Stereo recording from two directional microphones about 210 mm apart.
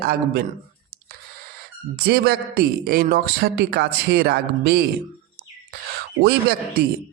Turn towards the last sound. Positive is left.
turn(degrees=-45)  # may be behind; listen again after turning